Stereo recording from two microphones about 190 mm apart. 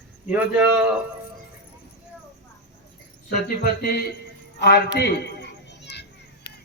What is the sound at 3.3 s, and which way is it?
Speech, 50° left (ahead or behind).